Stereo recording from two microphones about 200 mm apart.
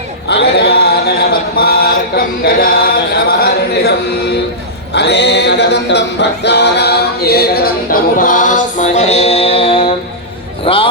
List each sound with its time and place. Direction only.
0.3 s a sound: 55° left (ahead or behind)
4.9 s a capella: 60° left (ahead or behind); by 9.9 s 25° left (ahead or behind)
10.7 s a man's voice: 25° left (ahead or behind)